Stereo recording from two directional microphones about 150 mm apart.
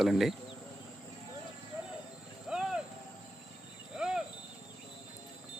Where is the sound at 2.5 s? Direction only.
5° right (ahead or behind).